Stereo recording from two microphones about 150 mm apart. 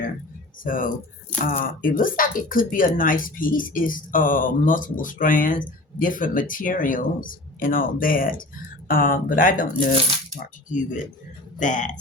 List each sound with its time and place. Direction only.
0.6 s speech: 65° left (ahead or behind)
10.7 s speech: 60° left (ahead or behind)